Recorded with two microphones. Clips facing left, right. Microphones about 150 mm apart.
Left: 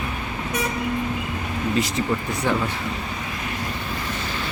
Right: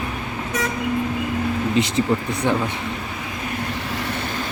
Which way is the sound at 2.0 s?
25° right (ahead or behind).